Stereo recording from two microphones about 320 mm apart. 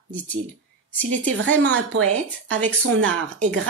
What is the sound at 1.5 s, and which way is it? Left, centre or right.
Speech, right.